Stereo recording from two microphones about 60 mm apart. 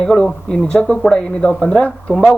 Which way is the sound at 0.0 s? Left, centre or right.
Centre.